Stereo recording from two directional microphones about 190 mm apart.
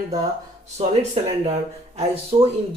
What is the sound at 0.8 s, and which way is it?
A woman's voice, 30° right (ahead or behind).